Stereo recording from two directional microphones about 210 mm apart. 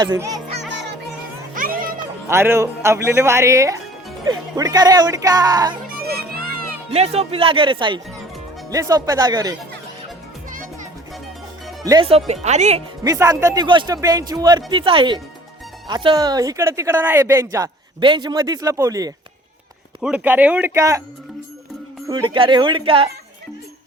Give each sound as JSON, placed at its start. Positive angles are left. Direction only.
{"t": 0.0, "sound": "speech", "side_deg": -15}
{"t": 1.5, "sound": "music", "side_deg": -40}
{"t": 2.2, "sound": "speech", "side_deg": -10}
{"t": 6.0, "sound": "music", "side_deg": -45}
{"t": 6.9, "sound": "speech", "side_deg": -30}
{"t": 11.9, "sound": "speech", "side_deg": -25}
{"t": 13.0, "sound": "speech", "side_deg": -15}
{"t": 20.0, "sound": "speech", "side_deg": -5}
{"t": 22.0, "sound": "speech", "side_deg": -20}